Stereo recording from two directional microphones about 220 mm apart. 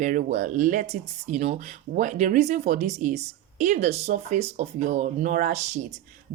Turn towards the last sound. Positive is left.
turn(degrees=-30)  # may be behind; listen again after turning